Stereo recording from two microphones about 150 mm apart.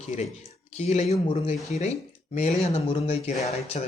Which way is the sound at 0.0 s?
50° left (ahead or behind).